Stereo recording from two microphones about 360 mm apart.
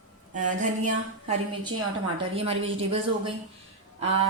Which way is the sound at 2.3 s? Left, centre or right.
Centre.